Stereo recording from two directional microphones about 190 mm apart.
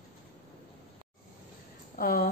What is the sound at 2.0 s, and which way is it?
Speech, 50° left (ahead or behind).